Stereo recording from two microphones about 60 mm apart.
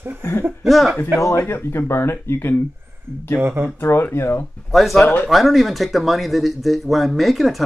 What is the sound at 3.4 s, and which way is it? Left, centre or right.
Speech, right.